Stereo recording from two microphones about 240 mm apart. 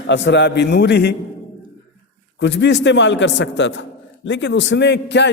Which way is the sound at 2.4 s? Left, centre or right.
Left.